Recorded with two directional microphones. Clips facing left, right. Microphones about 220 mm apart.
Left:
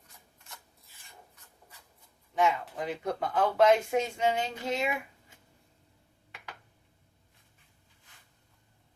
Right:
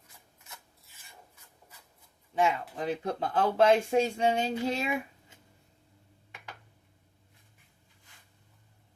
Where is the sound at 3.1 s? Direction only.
30° right (ahead or behind).